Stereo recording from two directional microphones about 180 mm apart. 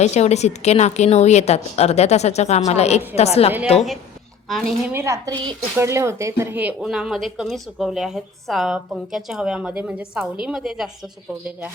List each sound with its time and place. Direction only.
0.0 s a woman's voice: 40° left (ahead or behind)
4.5 s speech: centre (ahead or behind)
4.9 s a woman's voice: 15° right (ahead or behind)